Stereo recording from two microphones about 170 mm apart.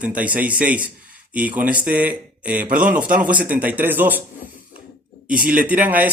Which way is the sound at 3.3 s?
10° right (ahead or behind).